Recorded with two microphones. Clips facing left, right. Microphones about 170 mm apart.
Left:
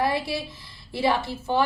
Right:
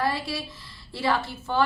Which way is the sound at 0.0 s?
20° left (ahead or behind).